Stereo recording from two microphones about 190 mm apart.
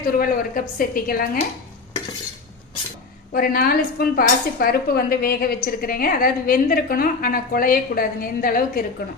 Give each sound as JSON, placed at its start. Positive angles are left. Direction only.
{"t": 0.0, "sound": "speech", "side_deg": 45}
{"t": 3.3, "sound": "speech", "side_deg": 50}